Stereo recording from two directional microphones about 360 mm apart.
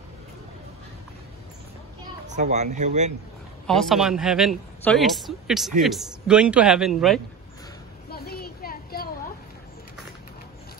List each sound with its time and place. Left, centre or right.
2.2 s speech: centre
3.6 s speech: centre
8.1 s a sound: left